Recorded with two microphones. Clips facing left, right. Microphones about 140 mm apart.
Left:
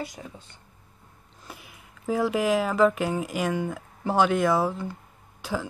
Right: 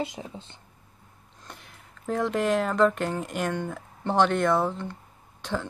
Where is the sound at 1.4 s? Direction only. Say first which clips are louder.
Left 2 dB; 5° left (ahead or behind).